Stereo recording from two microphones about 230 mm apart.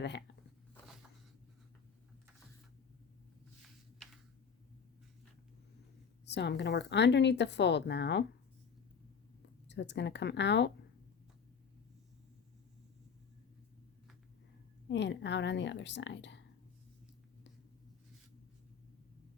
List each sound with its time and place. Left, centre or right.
0.0 s a woman's voice: left
3.6 s a sound: centre
6.2 s a woman's voice: left
9.6 s a woman's voice: left
14.8 s a woman's voice: left